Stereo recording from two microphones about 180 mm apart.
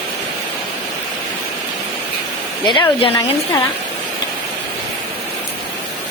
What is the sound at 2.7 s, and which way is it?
Speech, 30° left (ahead or behind).